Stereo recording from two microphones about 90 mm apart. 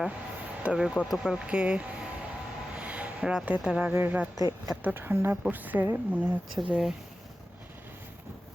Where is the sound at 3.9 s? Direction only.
20° right (ahead or behind).